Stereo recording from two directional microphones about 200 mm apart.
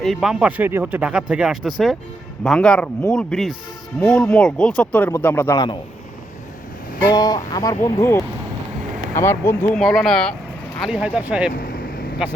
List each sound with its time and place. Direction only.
0.0 s speech: centre (ahead or behind); by 5.8 s 20° left (ahead or behind)
7.1 s speech: 20° left (ahead or behind); by 11.5 s 5° right (ahead or behind)
11.9 s vehicle: 45° left (ahead or behind)